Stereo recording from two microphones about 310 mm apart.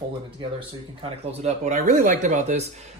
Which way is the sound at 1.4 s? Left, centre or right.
Right.